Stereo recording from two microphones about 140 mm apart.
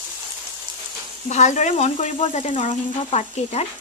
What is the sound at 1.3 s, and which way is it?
Frying, 60° left (ahead or behind).